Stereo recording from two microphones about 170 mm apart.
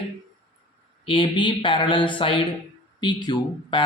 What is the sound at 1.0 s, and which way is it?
Speech, 30° left (ahead or behind).